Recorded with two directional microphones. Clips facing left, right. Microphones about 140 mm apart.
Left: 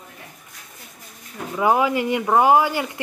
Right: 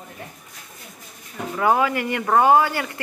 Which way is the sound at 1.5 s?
15° left (ahead or behind).